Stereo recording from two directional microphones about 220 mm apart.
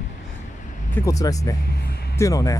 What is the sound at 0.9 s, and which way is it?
Speech, 15° left (ahead or behind).